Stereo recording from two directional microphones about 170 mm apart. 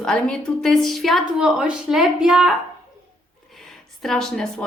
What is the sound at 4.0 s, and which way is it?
Speech, 5° left (ahead or behind).